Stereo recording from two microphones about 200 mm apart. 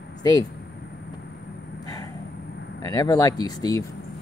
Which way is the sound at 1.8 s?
20° left (ahead or behind).